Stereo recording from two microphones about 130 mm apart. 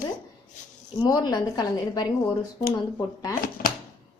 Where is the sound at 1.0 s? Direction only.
30° left (ahead or behind).